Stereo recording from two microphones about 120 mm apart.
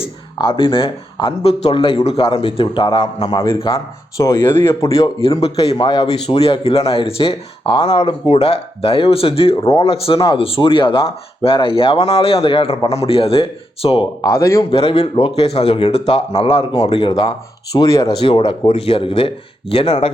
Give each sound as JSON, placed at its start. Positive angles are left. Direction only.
{"t": 0.0, "sound": "speech", "side_deg": 45}
{"t": 4.2, "sound": "speech", "side_deg": 20}
{"t": 5.4, "sound": "speech", "side_deg": 50}
{"t": 5.7, "sound": "speech", "side_deg": 40}
{"t": 14.2, "sound": "speech", "side_deg": 25}
{"t": 14.6, "sound": "speech", "side_deg": 45}
{"t": 18.1, "sound": "speech", "side_deg": 50}